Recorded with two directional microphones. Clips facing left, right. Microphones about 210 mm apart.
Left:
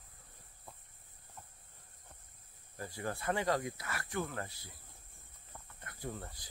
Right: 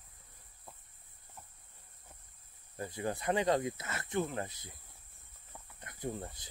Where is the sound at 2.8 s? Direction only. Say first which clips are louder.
Right 3 dB; 20° right (ahead or behind).